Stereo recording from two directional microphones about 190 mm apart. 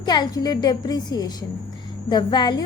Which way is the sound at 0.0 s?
20° left (ahead or behind).